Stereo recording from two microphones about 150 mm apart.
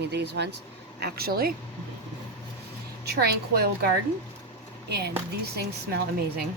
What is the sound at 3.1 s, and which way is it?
Speech, 90° right.